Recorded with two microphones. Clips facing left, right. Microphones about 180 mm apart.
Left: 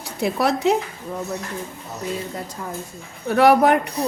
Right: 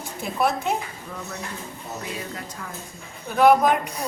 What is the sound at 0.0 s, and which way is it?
Speech, 75° left (ahead or behind).